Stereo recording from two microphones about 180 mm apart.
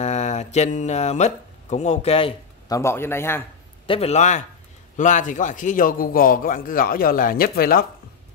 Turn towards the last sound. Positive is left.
turn(degrees=55)  # may be behind; listen again after turning